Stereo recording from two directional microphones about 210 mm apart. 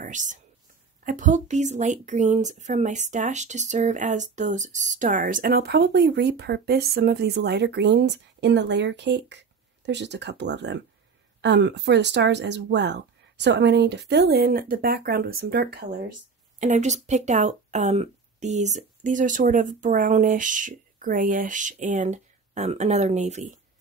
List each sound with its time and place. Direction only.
0.0 s speech: 35° right (ahead or behind)
16.5 s speech: 35° right (ahead or behind)